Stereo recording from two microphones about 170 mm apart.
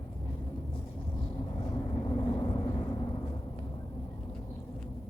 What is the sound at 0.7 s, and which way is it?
Vehicle, 25° left (ahead or behind).